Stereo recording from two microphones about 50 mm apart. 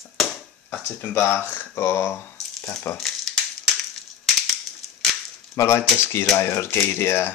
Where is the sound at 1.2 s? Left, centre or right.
Left.